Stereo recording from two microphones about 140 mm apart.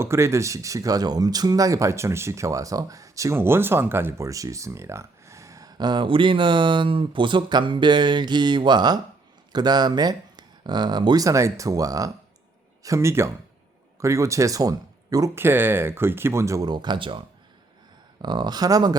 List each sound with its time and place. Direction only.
0.0 s speech: 20° right (ahead or behind)